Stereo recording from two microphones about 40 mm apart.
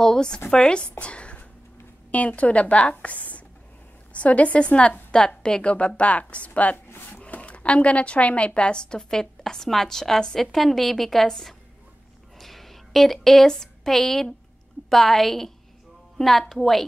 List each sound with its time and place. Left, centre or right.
0.0 s a woman's voice: centre
5.6 s a woman's voice: left; by 11.5 s centre
12.4 s a sound: centre
13.5 s a woman's voice: centre